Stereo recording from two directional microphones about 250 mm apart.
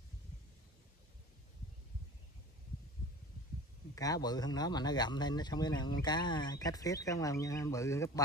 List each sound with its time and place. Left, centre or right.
3.9 s speech: centre